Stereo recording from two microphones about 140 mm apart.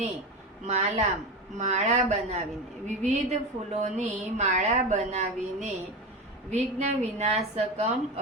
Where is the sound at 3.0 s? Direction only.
55° right (ahead or behind).